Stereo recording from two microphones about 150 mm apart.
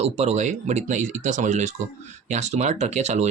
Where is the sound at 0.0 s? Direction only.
45° right (ahead or behind).